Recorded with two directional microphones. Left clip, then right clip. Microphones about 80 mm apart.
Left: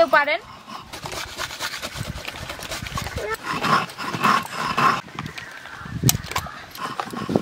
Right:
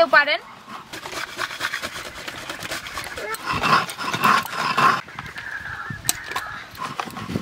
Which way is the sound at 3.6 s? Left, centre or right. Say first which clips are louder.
Right 2 dB; centre.